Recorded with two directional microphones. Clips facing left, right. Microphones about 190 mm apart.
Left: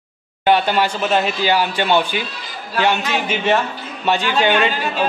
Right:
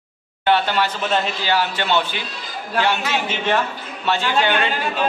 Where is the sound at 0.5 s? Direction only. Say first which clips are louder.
Left 3 dB; 15° left (ahead or behind).